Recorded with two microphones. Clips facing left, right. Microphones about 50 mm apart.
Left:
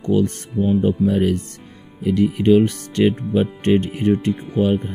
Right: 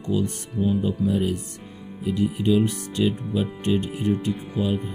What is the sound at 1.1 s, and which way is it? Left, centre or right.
Speech, left.